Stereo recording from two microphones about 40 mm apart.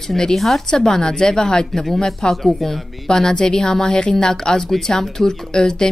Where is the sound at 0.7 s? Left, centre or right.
Centre.